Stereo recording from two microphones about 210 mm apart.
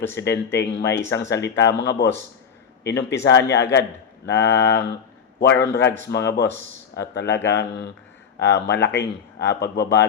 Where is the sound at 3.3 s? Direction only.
55° left (ahead or behind).